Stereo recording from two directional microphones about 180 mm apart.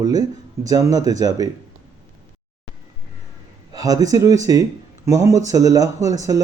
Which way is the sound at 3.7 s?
20° right (ahead or behind).